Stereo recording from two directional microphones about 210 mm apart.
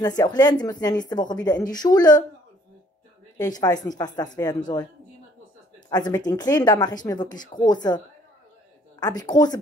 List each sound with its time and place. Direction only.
0.0 s a woman's voice: 20° left (ahead or behind)
3.3 s a woman's voice: 20° left (ahead or behind)
5.9 s a woman's voice: 20° left (ahead or behind)
9.0 s a woman's voice: 20° left (ahead or behind)